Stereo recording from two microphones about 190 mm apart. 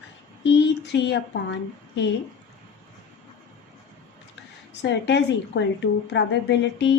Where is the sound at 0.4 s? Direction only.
65° left (ahead or behind).